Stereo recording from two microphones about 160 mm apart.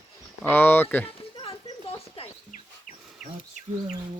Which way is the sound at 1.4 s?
35° left (ahead or behind).